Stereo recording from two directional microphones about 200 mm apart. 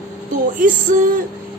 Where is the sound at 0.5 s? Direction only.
40° right (ahead or behind).